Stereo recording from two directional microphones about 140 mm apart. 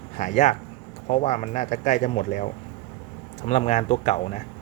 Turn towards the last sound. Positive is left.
turn(degrees=55)  # may be behind; listen again after turning